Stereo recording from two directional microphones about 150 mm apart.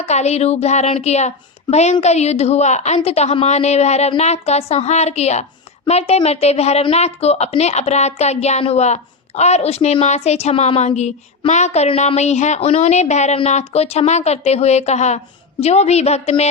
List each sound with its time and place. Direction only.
0.0 s speech: 45° left (ahead or behind)